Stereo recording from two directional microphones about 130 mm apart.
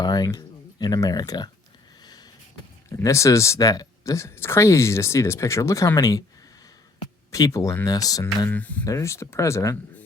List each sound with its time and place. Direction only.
0.0 s speech: 30° left (ahead or behind)
3.0 s speech: 25° left (ahead or behind)
7.3 s speech: 25° left (ahead or behind)
8.4 s speech: 10° left (ahead or behind)